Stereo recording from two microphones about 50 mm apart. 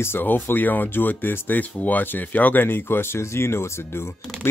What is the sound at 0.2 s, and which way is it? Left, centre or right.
Speech, left.